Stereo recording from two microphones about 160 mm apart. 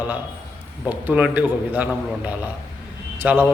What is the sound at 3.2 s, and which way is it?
Speech, 10° right (ahead or behind).